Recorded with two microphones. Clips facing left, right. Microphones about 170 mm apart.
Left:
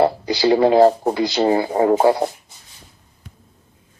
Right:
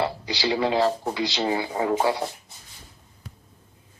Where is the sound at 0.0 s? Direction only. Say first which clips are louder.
Left 9 dB; 45° left (ahead or behind).